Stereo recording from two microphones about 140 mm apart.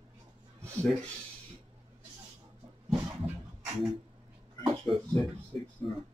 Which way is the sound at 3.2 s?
10° right (ahead or behind).